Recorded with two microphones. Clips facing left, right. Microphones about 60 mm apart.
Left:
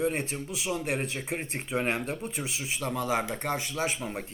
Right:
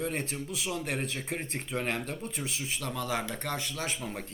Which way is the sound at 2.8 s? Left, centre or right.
Centre.